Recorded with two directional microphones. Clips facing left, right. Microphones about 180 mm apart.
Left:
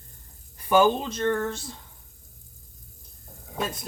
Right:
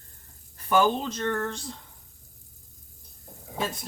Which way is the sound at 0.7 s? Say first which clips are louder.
Left 3 dB; 10° left (ahead or behind).